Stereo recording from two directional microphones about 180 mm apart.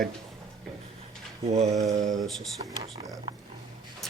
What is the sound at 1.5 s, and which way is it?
Mantra, 35° right (ahead or behind).